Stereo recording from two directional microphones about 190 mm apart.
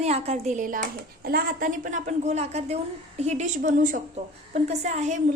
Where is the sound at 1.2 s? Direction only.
50° right (ahead or behind).